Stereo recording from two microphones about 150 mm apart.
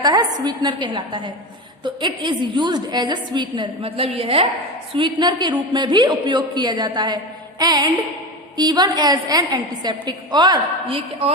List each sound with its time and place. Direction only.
0.0 s a woman's voice: 25° right (ahead or behind)